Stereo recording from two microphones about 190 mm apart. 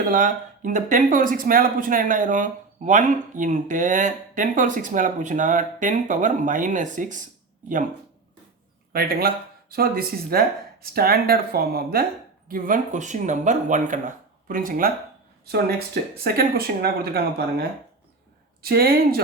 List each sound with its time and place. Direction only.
0.1 s speech: 45° right (ahead or behind)
8.9 s speech: 50° right (ahead or behind)
16.1 s speech: 55° right (ahead or behind)
18.6 s speech: 55° right (ahead or behind)